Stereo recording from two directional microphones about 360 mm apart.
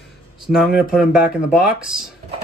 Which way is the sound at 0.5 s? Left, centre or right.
Centre.